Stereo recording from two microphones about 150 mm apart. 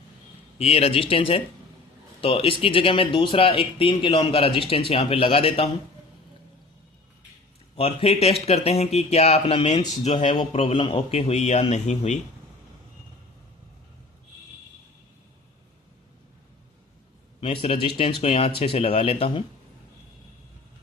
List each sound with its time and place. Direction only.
0.6 s speech: 40° left (ahead or behind)
7.8 s speech: 40° left (ahead or behind)
17.4 s speech: 35° left (ahead or behind)